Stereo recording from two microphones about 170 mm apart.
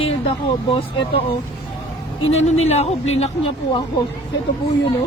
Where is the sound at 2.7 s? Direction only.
40° left (ahead or behind).